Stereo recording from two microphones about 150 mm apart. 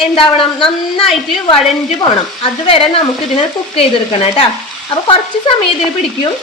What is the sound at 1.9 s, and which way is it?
A woman's voice, 35° left (ahead or behind).